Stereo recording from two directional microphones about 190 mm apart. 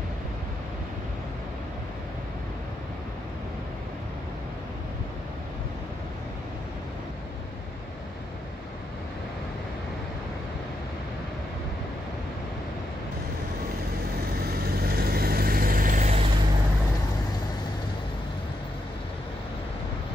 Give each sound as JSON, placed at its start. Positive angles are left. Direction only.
{"t": 14.5, "sound": "vehicle", "side_deg": -55}